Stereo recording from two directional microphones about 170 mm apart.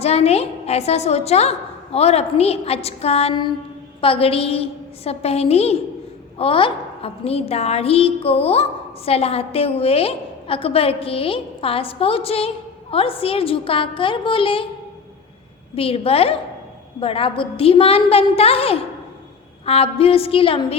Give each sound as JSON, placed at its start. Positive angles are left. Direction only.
{"t": 0.0, "sound": "a woman's voice", "side_deg": 40}
{"t": 15.7, "sound": "a woman's voice", "side_deg": 35}